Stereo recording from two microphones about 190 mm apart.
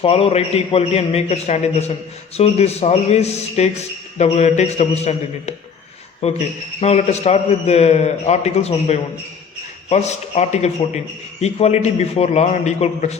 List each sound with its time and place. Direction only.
0.0 s a man's voice: 30° left (ahead or behind)